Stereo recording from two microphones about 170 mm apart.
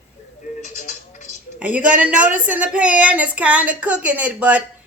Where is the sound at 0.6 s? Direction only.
45° left (ahead or behind).